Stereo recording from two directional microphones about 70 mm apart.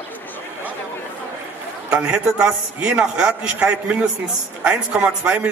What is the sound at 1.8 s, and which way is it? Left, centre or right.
A man's voice, centre.